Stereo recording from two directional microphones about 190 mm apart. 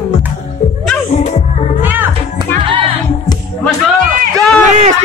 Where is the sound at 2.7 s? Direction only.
25° right (ahead or behind).